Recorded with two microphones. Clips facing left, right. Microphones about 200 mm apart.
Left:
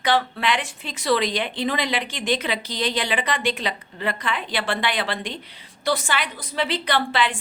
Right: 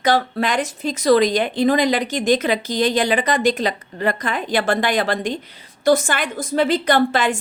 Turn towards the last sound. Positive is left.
turn(degrees=-45)  # may be behind; listen again after turning